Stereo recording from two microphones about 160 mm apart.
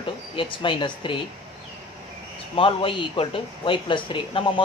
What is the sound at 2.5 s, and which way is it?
Speech, 35° left (ahead or behind).